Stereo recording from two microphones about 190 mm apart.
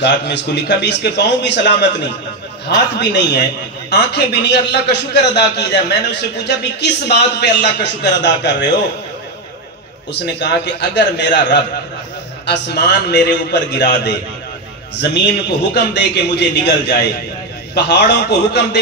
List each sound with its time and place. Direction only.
0.0 s a man's voice: 65° left (ahead or behind)
3.0 s a man's voice: 65° left (ahead or behind)
10.2 s a man's voice: 65° left (ahead or behind)
12.4 s a man's voice: 60° left (ahead or behind)